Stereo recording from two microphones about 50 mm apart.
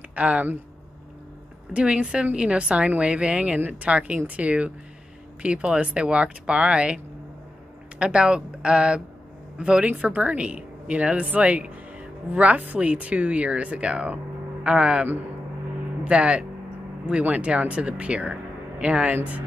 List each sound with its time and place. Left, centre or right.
0.1 s speech: right
1.7 s speech: right
8.0 s speech: centre